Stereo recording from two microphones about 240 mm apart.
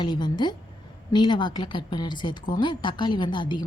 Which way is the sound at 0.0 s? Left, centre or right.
Centre.